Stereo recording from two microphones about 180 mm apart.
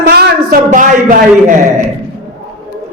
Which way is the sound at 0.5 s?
45° right (ahead or behind).